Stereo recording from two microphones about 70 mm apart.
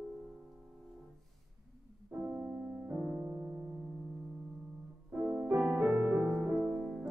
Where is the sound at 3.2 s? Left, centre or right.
Right.